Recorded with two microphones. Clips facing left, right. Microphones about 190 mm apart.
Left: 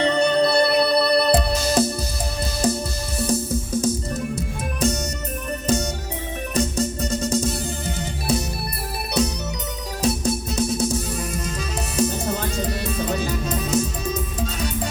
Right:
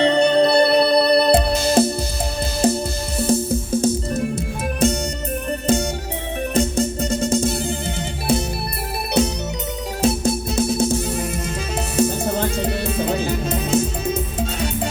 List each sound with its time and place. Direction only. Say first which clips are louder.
0.0 s music: right 3 dB; 30° right (ahead or behind)
3.2 s music: right 4 dB; 30° right (ahead or behind)
6.5 s music: right 3 dB; 30° right (ahead or behind)